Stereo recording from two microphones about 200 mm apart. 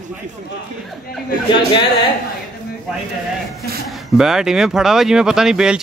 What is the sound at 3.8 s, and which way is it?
Speech, centre (ahead or behind).